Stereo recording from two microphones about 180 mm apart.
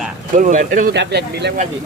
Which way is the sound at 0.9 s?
70° right (ahead or behind).